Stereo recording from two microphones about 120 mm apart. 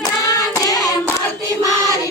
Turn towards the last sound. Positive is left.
turn(degrees=30)  # may be behind; listen again after turning